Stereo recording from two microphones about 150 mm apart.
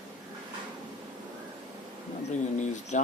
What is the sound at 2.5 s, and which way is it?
Bird, 55° left (ahead or behind).